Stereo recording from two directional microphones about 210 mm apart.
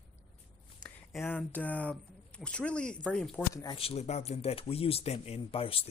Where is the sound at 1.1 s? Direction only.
5° left (ahead or behind).